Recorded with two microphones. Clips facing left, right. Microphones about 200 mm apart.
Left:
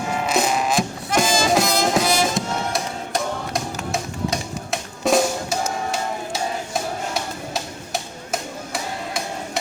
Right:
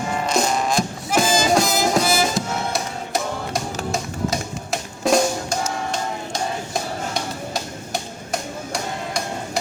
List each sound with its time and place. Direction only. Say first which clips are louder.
0.1 s music: even; 5° left (ahead or behind)